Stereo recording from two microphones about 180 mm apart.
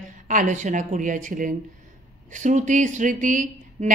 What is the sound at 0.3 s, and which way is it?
Speech, 45° right (ahead or behind).